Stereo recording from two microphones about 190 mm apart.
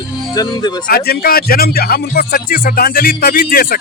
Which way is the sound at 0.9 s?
55° left (ahead or behind).